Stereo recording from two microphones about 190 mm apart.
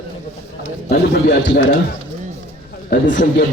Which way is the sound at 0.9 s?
60° left (ahead or behind).